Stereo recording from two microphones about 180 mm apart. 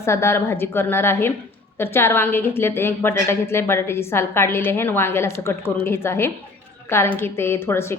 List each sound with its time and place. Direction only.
0.0 s a woman's voice: 15° left (ahead or behind)